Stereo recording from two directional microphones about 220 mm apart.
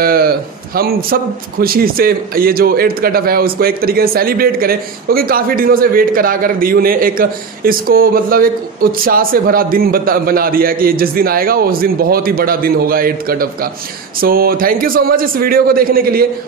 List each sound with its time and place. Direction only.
0.0 s a man's voice: 45° right (ahead or behind)